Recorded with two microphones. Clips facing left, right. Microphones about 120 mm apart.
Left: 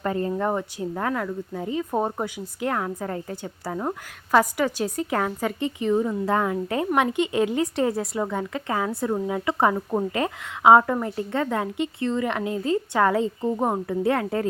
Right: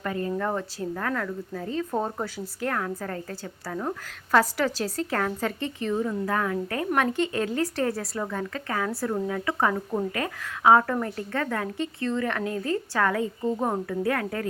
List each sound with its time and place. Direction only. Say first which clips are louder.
0.0 s a woman's voice: left 3 dB; 30° left (ahead or behind)
4.3 s a woman's voice: left 2 dB; 10° left (ahead or behind)